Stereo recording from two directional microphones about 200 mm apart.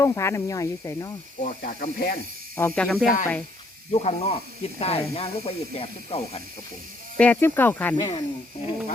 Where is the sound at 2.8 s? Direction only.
Centre (ahead or behind).